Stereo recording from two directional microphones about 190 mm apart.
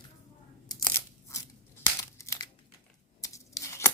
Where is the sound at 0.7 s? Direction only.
15° left (ahead or behind).